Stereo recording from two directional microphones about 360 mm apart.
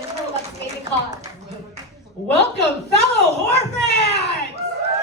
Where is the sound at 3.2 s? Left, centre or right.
Left.